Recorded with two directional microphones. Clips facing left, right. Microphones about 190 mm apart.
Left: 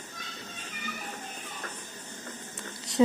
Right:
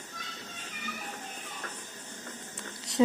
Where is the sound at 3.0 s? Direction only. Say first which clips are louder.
Left 2 dB; 45° left (ahead or behind).